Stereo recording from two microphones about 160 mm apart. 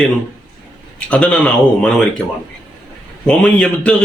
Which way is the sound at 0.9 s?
5° left (ahead or behind).